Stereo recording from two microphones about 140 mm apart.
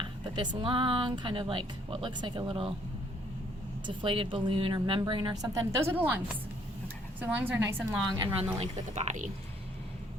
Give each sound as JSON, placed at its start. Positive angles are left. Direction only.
{"t": 0.0, "sound": "speech", "side_deg": -35}
{"t": 3.8, "sound": "a woman's voice", "side_deg": -40}
{"t": 8.5, "sound": "speech", "side_deg": -60}